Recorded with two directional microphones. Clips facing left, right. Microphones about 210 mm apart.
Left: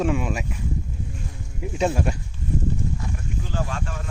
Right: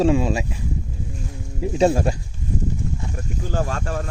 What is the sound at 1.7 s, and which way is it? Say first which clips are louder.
Speech: right 5 dB; 35° right (ahead or behind).